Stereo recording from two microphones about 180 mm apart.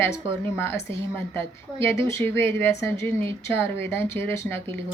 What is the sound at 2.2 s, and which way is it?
A woman's voice, 15° left (ahead or behind).